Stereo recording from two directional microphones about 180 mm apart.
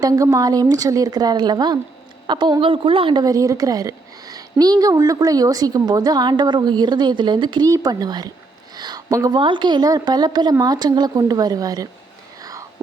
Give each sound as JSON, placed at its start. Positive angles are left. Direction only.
{"t": 0.0, "sound": "a woman's voice", "side_deg": -20}
{"t": 12.4, "sound": "whispering", "side_deg": -20}